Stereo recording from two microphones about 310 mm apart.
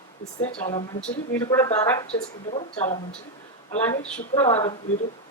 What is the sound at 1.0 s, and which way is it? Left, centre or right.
Speech, centre.